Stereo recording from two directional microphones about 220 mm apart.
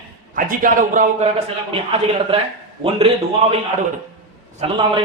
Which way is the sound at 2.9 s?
25° right (ahead or behind).